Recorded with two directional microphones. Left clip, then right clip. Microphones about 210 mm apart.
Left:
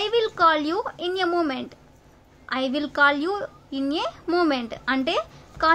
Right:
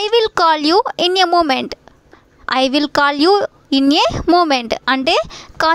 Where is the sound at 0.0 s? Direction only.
50° right (ahead or behind).